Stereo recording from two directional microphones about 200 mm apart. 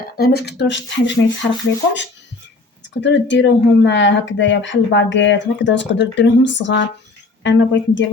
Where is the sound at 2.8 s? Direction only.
60° left (ahead or behind).